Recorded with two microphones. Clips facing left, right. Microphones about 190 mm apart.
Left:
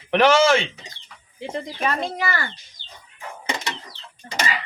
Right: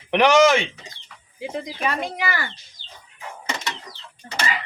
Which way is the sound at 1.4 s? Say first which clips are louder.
Even; 5° right (ahead or behind).